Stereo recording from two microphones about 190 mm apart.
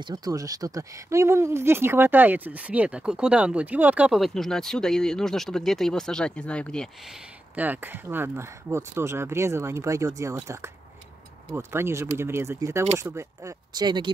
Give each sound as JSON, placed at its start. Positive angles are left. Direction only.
{"t": 0.0, "sound": "speech", "side_deg": -20}
{"t": 7.5, "sound": "speech", "side_deg": -10}